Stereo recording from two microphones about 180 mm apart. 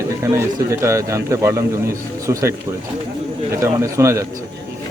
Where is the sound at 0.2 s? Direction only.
15° right (ahead or behind).